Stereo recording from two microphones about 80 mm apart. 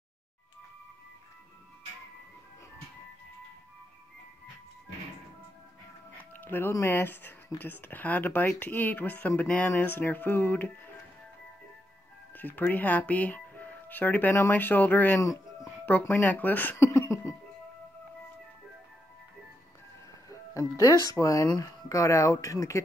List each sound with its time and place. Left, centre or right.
6.1 s music: left
6.9 s speech: left
12.4 s speech: left
15.1 s music: left
16.0 s speech: left
16.7 s speech: left
20.5 s speech: left